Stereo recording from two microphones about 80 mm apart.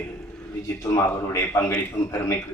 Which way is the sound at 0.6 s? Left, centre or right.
Left.